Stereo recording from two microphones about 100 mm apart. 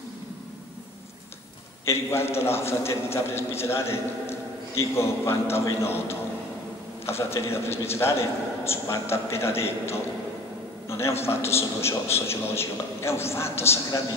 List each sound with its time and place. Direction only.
1.9 s a man's voice: 25° left (ahead or behind)